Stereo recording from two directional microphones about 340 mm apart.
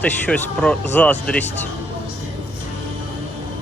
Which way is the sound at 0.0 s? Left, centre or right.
Centre.